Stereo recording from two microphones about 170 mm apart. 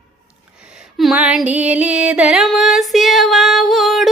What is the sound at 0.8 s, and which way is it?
Music, centre (ahead or behind).